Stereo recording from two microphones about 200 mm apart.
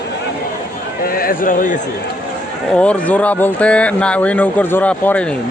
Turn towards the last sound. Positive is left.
turn(degrees=5)  # may be behind; listen again after turning